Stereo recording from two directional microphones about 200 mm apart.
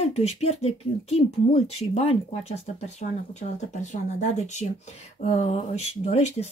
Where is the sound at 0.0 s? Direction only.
30° left (ahead or behind).